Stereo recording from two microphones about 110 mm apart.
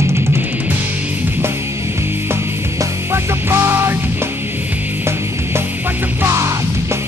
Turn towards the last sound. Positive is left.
turn(degrees=-25)  # may be behind; listen again after turning